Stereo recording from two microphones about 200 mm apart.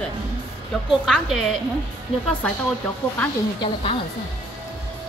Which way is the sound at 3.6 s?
25° left (ahead or behind).